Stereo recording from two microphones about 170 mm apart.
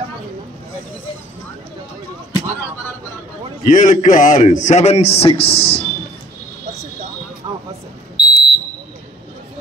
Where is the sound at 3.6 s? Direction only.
50° left (ahead or behind).